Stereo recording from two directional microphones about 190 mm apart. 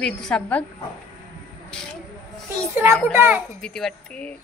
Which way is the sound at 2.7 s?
15° right (ahead or behind).